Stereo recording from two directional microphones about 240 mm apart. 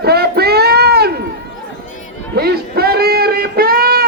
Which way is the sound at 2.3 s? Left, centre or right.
Right.